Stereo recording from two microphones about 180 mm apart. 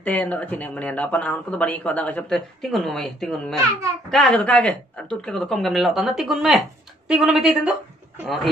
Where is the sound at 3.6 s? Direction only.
20° right (ahead or behind).